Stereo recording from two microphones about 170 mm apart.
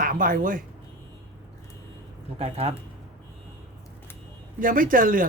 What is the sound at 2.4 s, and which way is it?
Speech, 35° right (ahead or behind).